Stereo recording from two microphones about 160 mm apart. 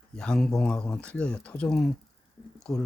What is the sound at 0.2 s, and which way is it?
Speech, 5° left (ahead or behind).